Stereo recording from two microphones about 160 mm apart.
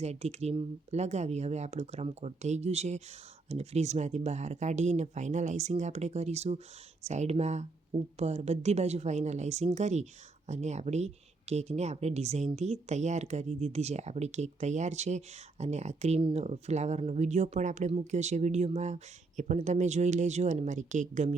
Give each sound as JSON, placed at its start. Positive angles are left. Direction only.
{"t": 0.0, "sound": "speech", "side_deg": -40}